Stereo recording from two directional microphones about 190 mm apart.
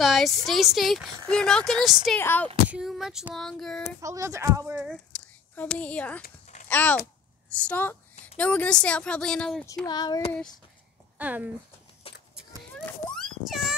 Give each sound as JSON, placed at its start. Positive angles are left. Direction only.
{"t": 0.0, "sound": "a woman's voice", "side_deg": 0}
{"t": 2.7, "sound": "speech", "side_deg": 0}
{"t": 4.0, "sound": "speech", "side_deg": -15}
{"t": 4.8, "sound": "speech", "side_deg": 5}
{"t": 6.2, "sound": "a sound", "side_deg": 40}
{"t": 6.7, "sound": "a child's voice", "side_deg": 10}
{"t": 9.8, "sound": "child singing", "side_deg": 20}
{"t": 11.1, "sound": "speech", "side_deg": -10}
{"t": 12.8, "sound": "a sound", "side_deg": 5}